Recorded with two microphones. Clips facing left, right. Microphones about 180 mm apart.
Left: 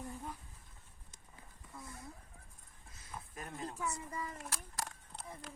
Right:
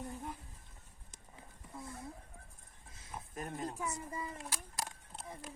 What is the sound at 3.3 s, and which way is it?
Speech, 40° right (ahead or behind).